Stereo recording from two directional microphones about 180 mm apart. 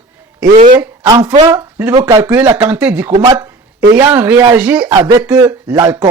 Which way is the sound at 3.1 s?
20° right (ahead or behind).